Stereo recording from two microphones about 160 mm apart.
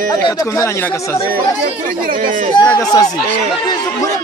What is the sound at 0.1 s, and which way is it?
Speech, 20° left (ahead or behind).